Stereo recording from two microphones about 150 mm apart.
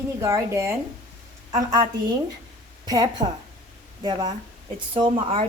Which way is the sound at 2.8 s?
25° right (ahead or behind).